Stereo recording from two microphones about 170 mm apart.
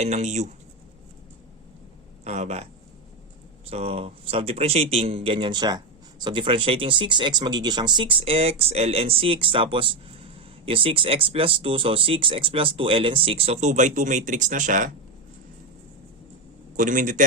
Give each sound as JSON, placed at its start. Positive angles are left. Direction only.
{"t": 0.0, "sound": "speech", "side_deg": -40}
{"t": 2.2, "sound": "speech", "side_deg": -40}
{"t": 3.7, "sound": "speech", "side_deg": -35}
{"t": 16.7, "sound": "a man's voice", "side_deg": -50}